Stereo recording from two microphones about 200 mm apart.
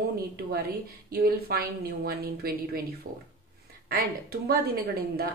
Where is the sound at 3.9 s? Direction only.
50° right (ahead or behind).